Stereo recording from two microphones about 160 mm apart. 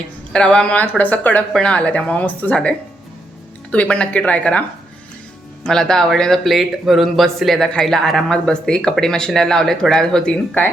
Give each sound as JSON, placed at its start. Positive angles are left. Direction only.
{"t": 0.3, "sound": "speech", "side_deg": 5}
{"t": 5.6, "sound": "speech", "side_deg": 5}